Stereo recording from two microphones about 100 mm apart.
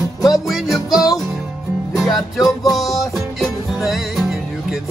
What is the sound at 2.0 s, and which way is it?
Music, centre (ahead or behind).